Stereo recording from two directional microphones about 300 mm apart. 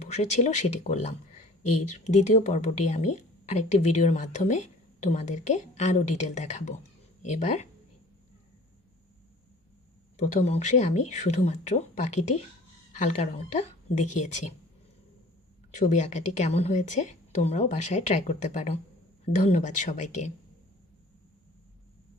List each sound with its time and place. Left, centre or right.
0.0 s a woman's voice: left
1.6 s speech: left
1.9 s a woman's voice: left
10.2 s a woman's voice: left
15.7 s a woman's voice: left